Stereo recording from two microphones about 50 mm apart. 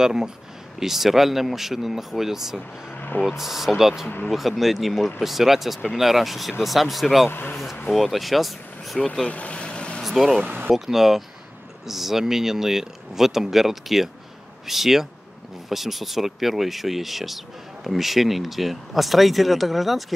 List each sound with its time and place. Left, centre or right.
0.0 s speech: centre
7.2 s speech: left
7.9 s speech: centre
9.0 s vehicle: centre
10.0 s speech: centre
10.4 s speech: right
10.7 s speech: centre